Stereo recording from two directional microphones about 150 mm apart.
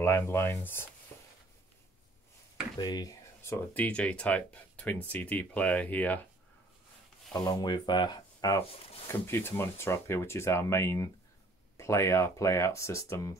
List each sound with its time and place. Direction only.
0.0 s speech: 15° left (ahead or behind)
2.8 s speech: 25° left (ahead or behind); by 6.2 s 10° left (ahead or behind)
7.4 s speech: 25° left (ahead or behind)